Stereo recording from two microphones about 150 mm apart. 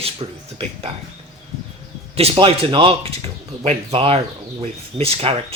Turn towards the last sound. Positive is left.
turn(degrees=-40)  # may be behind; listen again after turning